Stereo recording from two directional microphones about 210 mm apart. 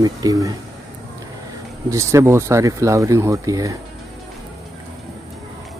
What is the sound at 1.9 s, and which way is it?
Speech, 15° right (ahead or behind).